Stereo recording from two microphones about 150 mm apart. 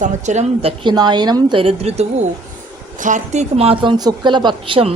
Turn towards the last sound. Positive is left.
turn(degrees=-35)  # may be behind; listen again after turning